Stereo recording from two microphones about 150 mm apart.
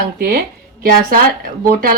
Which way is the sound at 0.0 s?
70° right (ahead or behind).